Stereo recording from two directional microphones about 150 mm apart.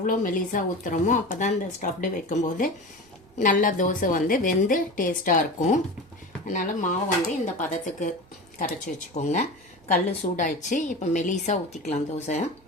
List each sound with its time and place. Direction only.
0.0 s a woman's voice: 65° left (ahead or behind)
9.1 s a woman's voice: 50° left (ahead or behind)